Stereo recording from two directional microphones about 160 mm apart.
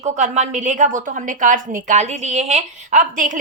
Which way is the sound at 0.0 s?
50° right (ahead or behind).